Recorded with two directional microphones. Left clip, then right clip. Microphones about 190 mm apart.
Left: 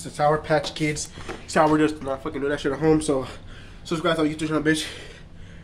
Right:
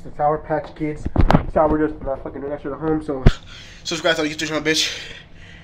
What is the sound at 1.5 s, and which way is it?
Speech, 30° left (ahead or behind).